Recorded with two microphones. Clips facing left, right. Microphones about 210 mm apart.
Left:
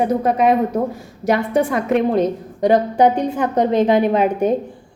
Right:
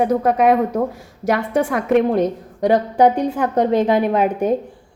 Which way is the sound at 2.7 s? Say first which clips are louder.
Even; 20° left (ahead or behind).